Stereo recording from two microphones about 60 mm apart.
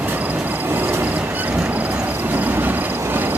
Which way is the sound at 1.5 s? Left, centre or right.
Right.